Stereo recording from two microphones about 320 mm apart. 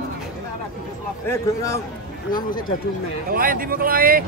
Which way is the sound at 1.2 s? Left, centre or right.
Centre.